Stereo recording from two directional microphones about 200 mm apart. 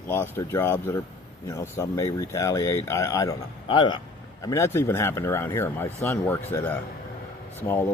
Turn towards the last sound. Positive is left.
turn(degrees=10)  # may be behind; listen again after turning